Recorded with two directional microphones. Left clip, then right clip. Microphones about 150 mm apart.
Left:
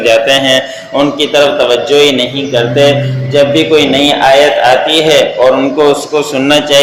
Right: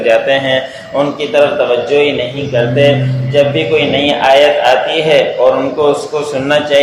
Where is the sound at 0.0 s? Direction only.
30° left (ahead or behind).